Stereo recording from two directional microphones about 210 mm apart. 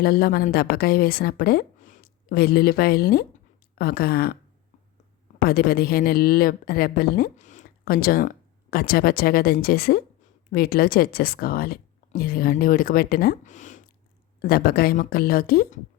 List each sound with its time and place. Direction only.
0.0 s a woman's voice: 45° left (ahead or behind)
5.4 s a woman's voice: 45° left (ahead or behind)